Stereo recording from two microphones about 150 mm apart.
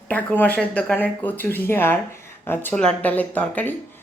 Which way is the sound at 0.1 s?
10° left (ahead or behind).